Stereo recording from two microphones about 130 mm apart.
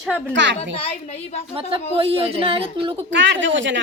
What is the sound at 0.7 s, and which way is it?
Speech, 50° left (ahead or behind).